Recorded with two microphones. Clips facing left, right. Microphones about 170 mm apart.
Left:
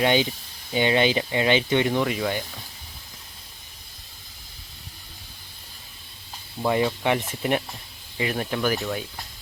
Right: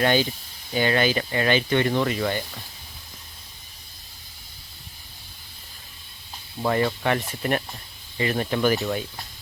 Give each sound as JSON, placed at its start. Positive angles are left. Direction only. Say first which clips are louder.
{"t": 0.0, "sound": "speech", "louder": "even", "side_deg": 15}
{"t": 6.6, "sound": "speech", "louder": "even", "side_deg": 10}